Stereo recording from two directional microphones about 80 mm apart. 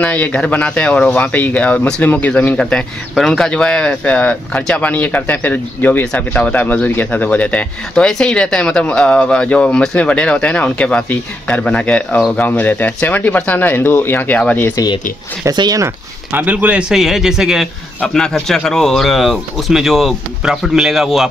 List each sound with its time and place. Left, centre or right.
0.0 s speech: centre
2.5 s speech: centre
15.5 s speech: right
16.3 s speech: right
16.9 s a man's voice: centre
18.0 s speech: centre